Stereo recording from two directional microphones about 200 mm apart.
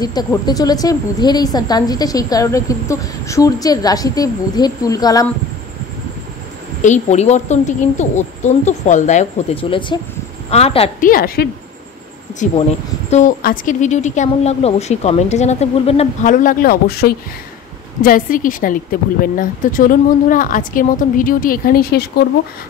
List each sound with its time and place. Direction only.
0.0 s a woman's voice: 20° left (ahead or behind)
6.8 s a woman's voice: 35° left (ahead or behind)
11.0 s a woman's voice: 45° left (ahead or behind)
13.1 s a woman's voice: 40° left (ahead or behind)